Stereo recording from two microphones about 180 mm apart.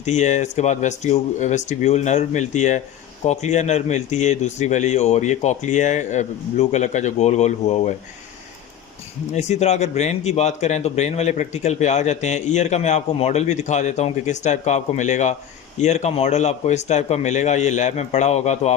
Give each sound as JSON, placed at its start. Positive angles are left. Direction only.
{"t": 0.0, "sound": "speech", "side_deg": 40}
{"t": 9.3, "sound": "speech", "side_deg": 40}